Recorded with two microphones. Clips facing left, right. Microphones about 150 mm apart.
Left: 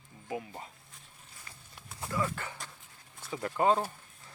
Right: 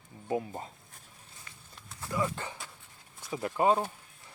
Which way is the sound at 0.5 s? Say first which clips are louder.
Right 4 dB; 45° right (ahead or behind).